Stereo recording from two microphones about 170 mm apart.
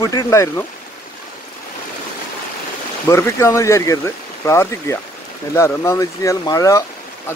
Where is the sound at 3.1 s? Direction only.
15° left (ahead or behind).